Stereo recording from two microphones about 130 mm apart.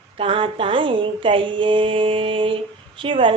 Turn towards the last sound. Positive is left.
turn(degrees=-40)  # may be behind; listen again after turning